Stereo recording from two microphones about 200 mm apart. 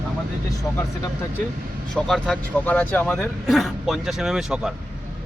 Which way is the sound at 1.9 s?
5° left (ahead or behind).